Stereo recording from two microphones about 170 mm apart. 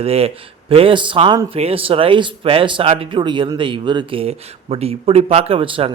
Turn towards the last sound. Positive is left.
turn(degrees=-30)  # may be behind; listen again after turning